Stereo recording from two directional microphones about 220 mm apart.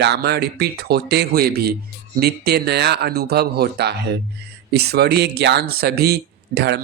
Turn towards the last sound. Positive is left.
turn(degrees=-50)  # may be behind; listen again after turning